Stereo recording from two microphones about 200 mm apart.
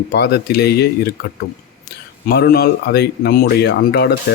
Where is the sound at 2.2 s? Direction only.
50° left (ahead or behind).